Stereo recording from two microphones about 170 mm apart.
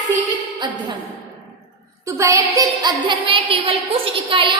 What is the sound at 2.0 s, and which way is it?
A woman's voice, 20° right (ahead or behind).